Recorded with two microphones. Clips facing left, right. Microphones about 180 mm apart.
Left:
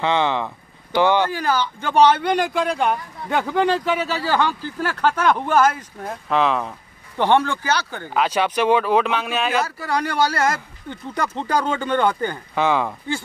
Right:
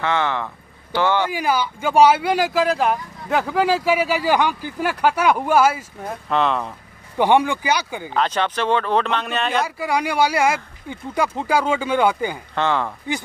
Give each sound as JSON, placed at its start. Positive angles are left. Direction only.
{"t": 0.0, "sound": "speech", "side_deg": 20}
{"t": 1.2, "sound": "speech", "side_deg": -10}
{"t": 7.2, "sound": "speech", "side_deg": -10}
{"t": 8.1, "sound": "speech", "side_deg": 10}
{"t": 9.6, "sound": "speech", "side_deg": -10}
{"t": 12.5, "sound": "speech", "side_deg": 10}